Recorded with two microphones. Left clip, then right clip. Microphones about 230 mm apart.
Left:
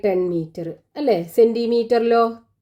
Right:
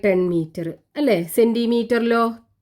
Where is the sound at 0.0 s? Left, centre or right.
Right.